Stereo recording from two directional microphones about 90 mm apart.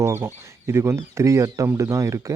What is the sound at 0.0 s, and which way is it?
Speech, 25° right (ahead or behind).